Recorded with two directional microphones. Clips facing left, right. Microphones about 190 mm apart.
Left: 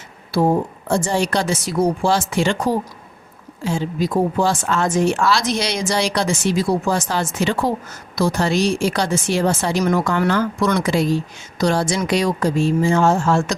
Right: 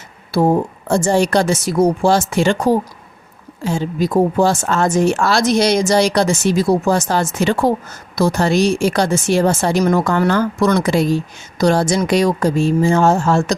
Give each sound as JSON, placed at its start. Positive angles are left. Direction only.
{"t": 0.9, "sound": "speech", "side_deg": -45}